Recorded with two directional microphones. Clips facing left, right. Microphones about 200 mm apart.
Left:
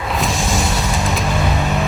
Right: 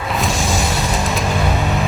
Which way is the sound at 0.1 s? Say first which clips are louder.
Right 1 dB; centre (ahead or behind).